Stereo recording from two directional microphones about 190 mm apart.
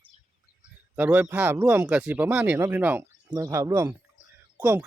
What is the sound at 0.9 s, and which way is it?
Speech, 10° right (ahead or behind).